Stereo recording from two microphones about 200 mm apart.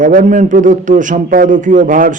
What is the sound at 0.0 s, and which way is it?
A man's voice, 40° right (ahead or behind).